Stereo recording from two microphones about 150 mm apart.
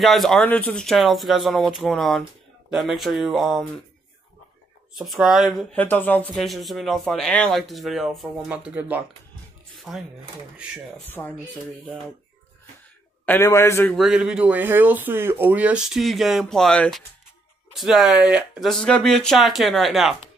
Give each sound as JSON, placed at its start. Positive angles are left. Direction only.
{"t": 0.0, "sound": "speech", "side_deg": 0}
{"t": 4.9, "sound": "speech", "side_deg": 0}
{"t": 5.8, "sound": "a man's voice", "side_deg": 10}
{"t": 6.3, "sound": "speech", "side_deg": 0}
{"t": 11.1, "sound": "a man's voice", "side_deg": 15}
{"t": 13.2, "sound": "a man's voice", "side_deg": 15}
{"t": 13.9, "sound": "speech", "side_deg": -5}